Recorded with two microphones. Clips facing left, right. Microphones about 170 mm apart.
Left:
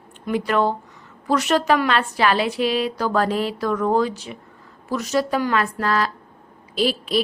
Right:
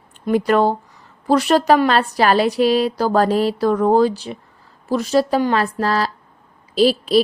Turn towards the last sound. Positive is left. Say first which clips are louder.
# right 6 dB
turn(degrees=-35)  # may be behind; listen again after turning